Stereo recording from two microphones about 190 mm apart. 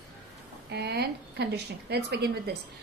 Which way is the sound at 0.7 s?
60° right (ahead or behind).